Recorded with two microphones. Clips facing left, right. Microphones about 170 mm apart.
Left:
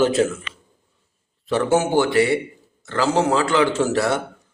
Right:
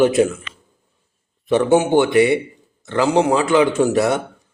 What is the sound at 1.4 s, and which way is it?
A man's voice, 20° right (ahead or behind).